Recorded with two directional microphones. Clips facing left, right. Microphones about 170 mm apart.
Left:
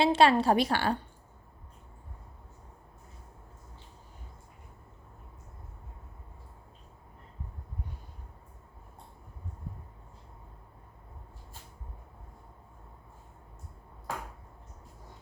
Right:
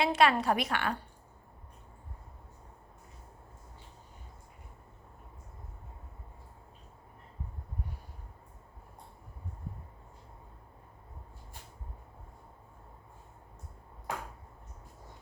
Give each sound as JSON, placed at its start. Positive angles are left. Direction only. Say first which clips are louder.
{"t": 0.0, "sound": "a woman's voice", "louder": "left 4 dB", "side_deg": 30}